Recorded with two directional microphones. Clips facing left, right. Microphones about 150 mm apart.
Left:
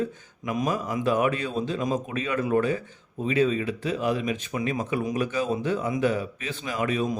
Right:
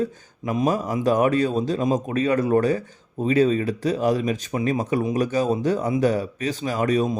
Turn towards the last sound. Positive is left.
turn(degrees=-40)  # may be behind; listen again after turning